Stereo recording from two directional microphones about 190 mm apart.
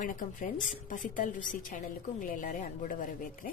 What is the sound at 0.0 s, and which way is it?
A woman's voice, 45° left (ahead or behind).